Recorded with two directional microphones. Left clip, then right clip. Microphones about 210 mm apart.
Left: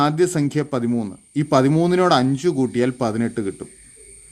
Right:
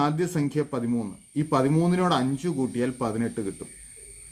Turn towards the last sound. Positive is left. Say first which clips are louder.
# left 6 dB
turn(degrees=50)  # may be behind; listen again after turning